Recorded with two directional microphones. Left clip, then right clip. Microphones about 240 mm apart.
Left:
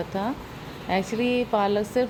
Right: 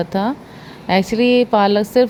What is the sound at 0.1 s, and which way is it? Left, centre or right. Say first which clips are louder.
A woman's voice: right 8 dB; right.